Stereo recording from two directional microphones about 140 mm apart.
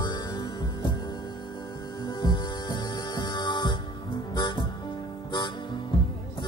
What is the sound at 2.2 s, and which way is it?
Music, 35° left (ahead or behind).